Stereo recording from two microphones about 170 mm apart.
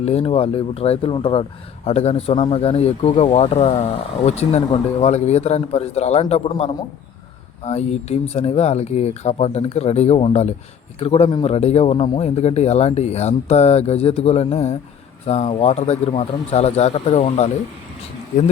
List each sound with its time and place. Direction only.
0.0 s speech: 35° left (ahead or behind)